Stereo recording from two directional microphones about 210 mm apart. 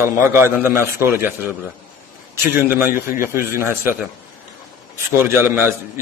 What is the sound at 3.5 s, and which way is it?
Speech, 10° right (ahead or behind).